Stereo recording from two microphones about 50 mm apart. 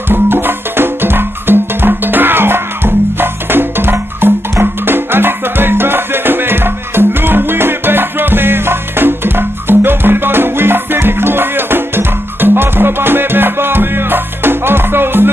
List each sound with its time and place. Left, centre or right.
0.1 s music: right